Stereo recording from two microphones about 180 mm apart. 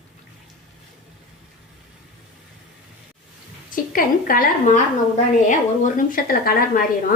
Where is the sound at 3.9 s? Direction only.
50° left (ahead or behind).